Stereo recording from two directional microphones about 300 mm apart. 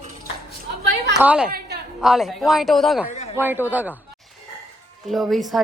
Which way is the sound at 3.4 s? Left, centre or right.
Centre.